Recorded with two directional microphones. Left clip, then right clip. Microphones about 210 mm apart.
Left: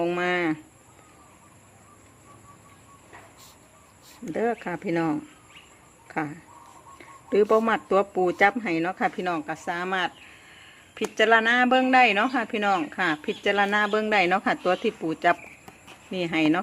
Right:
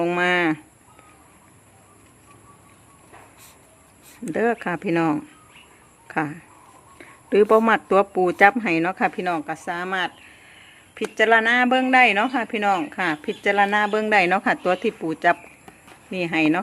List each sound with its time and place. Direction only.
0.0 s speech: 20° right (ahead or behind)
4.3 s speech: 20° right (ahead or behind)
10.5 s a sound: 5° right (ahead or behind)
11.1 s speech: 5° right (ahead or behind)